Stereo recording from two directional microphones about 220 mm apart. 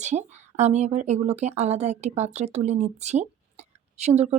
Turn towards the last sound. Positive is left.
turn(degrees=-30)  # may be behind; listen again after turning